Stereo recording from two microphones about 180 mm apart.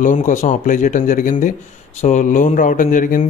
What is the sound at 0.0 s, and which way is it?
Speech, 45° left (ahead or behind).